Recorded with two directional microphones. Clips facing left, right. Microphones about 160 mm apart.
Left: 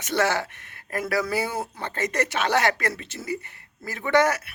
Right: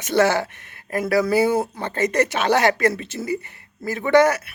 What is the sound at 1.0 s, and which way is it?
Speech, 35° right (ahead or behind).